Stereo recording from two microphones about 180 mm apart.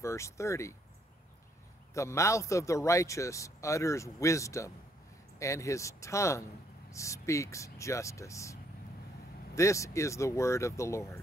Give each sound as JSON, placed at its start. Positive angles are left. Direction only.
{"t": 0.0, "sound": "speech", "side_deg": 15}
{"t": 2.0, "sound": "a man's voice", "side_deg": 15}
{"t": 9.6, "sound": "a man's voice", "side_deg": 15}